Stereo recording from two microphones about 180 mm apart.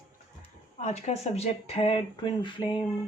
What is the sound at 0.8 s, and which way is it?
Speech, 40° left (ahead or behind).